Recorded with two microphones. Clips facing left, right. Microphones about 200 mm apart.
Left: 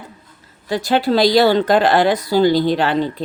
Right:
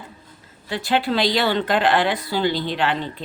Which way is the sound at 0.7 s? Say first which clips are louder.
Left 5 dB; 40° left (ahead or behind).